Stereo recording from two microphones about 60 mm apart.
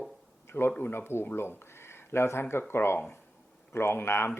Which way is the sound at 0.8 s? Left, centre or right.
Left.